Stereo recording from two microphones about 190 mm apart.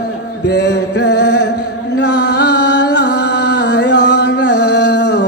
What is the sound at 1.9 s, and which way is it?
Music, 65° left (ahead or behind).